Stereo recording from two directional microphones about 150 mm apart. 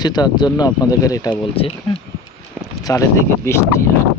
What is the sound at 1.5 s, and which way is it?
Speech, 35° left (ahead or behind).